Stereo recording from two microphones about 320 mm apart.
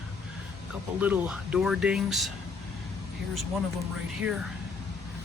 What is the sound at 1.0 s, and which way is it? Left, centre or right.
Speech, centre.